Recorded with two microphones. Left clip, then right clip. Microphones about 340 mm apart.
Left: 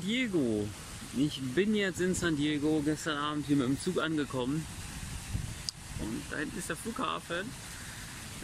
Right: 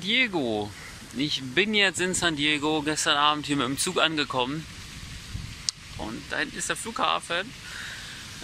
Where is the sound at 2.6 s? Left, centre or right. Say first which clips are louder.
Right 4 dB; right.